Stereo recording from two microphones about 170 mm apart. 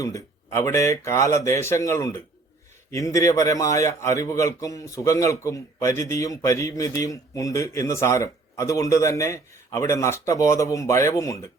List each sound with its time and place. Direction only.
0.0 s a man's voice: 20° left (ahead or behind)